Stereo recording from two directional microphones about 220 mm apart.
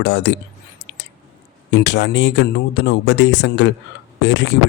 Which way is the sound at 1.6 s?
50° left (ahead or behind).